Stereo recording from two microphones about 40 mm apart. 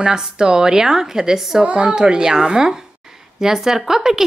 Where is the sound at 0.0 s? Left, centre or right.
Centre.